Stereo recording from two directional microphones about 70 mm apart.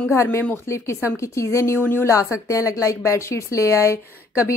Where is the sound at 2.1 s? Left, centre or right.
Left.